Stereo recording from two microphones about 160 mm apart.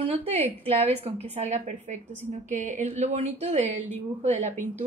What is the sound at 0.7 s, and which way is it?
A woman's voice, 40° right (ahead or behind).